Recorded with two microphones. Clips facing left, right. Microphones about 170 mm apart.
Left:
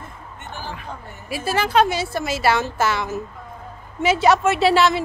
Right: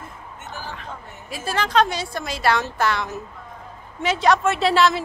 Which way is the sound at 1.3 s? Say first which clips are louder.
Left 2 dB; 5° left (ahead or behind).